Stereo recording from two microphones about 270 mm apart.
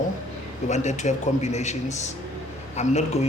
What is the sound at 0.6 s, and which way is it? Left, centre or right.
A man's voice, left.